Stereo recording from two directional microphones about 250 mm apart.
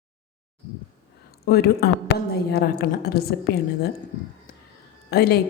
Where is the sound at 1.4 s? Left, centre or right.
Left.